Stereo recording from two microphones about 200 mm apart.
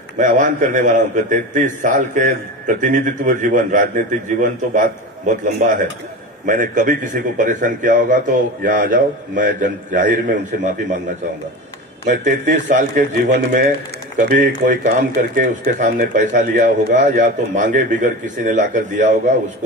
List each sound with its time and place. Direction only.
0.2 s speech: 40° right (ahead or behind)
12.6 s speech: 40° right (ahead or behind)